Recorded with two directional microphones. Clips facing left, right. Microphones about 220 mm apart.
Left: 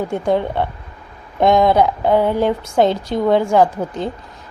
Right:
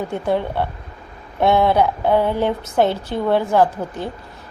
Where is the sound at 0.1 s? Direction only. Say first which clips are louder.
Left 3 dB; 15° left (ahead or behind).